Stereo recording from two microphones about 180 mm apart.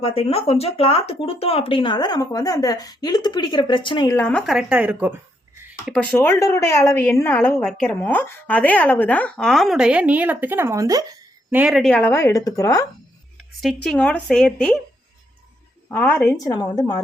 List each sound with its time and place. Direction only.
0.0 s speech: 30° left (ahead or behind); by 6.1 s centre (ahead or behind)
6.1 s a woman's voice: 15° left (ahead or behind); by 11.0 s 20° right (ahead or behind)
11.5 s a woman's voice: 5° right (ahead or behind); by 12.8 s 20° left (ahead or behind)
13.6 s speech: centre (ahead or behind)
15.9 s speech: 10° left (ahead or behind)